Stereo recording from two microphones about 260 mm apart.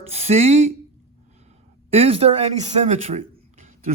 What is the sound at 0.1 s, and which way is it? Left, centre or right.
Speech, right.